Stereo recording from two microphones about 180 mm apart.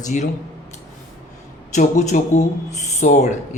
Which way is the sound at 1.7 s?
40° left (ahead or behind).